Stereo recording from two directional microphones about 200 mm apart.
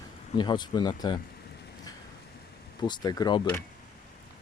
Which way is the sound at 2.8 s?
20° left (ahead or behind).